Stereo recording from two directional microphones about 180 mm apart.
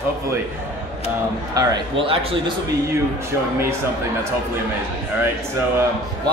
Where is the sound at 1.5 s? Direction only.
25° right (ahead or behind).